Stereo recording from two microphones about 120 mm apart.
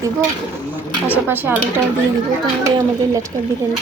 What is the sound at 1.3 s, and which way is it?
Speech, 15° right (ahead or behind).